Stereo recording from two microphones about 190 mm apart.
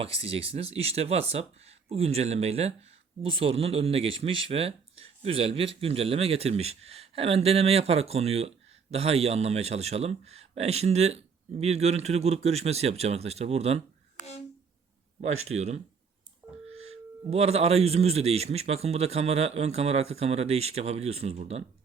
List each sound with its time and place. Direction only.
0.0 s speech: 30° right (ahead or behind)
15.2 s speech: 35° right (ahead or behind)